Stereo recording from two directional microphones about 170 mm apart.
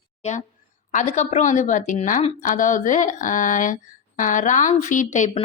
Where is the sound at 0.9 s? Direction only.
45° left (ahead or behind).